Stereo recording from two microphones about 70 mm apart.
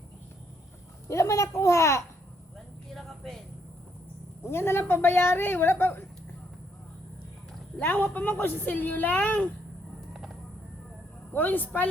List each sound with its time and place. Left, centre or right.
1.0 s a child's voice: left
2.9 s a sound: centre
4.4 s speech: left
7.8 s a woman's voice: left
11.3 s a woman's voice: left